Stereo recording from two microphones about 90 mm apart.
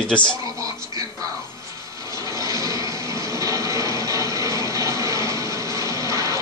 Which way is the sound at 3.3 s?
35° right (ahead or behind).